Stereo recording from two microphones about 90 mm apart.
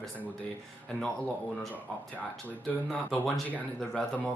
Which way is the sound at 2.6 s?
5° left (ahead or behind).